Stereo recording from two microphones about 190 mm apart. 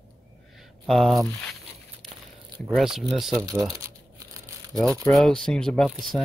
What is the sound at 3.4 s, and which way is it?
Crumpling, 20° right (ahead or behind).